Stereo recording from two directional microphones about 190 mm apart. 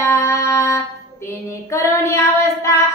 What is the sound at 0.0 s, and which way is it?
Music, 15° left (ahead or behind).